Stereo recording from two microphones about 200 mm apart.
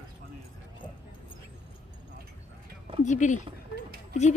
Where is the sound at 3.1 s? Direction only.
40° left (ahead or behind).